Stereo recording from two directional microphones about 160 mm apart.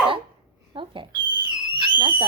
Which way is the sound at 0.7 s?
30° right (ahead or behind).